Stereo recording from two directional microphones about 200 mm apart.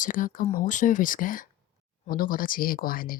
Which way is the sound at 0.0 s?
40° left (ahead or behind).